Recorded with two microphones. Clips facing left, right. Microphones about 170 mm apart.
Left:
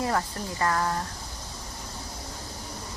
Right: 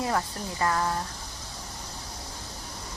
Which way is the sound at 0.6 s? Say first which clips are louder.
Even; 15° right (ahead or behind).